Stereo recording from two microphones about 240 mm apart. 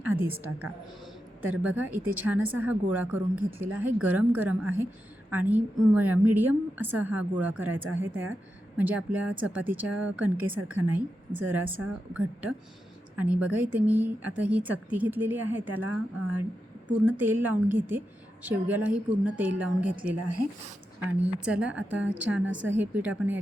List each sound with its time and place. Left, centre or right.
0.0 s a woman's voice: centre
7.9 s a woman's voice: right
8.8 s speech: centre
15.9 s speech: left
17.1 s speech: centre
21.4 s speech: centre
22.4 s a woman's voice: right
22.8 s speech: centre